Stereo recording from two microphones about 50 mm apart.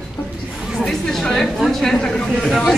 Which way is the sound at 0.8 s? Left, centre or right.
Centre.